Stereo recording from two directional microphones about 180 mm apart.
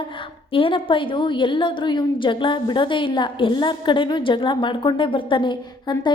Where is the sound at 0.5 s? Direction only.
30° left (ahead or behind).